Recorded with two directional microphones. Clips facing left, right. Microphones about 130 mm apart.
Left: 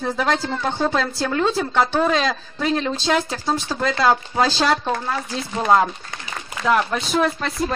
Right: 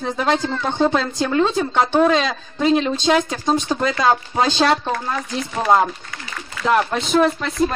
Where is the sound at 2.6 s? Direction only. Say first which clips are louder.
Right 5 dB; 15° right (ahead or behind).